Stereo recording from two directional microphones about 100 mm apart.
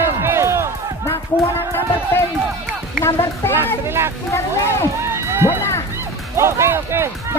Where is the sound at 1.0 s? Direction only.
25° left (ahead or behind).